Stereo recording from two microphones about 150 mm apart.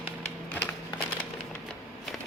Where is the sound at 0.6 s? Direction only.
10° left (ahead or behind).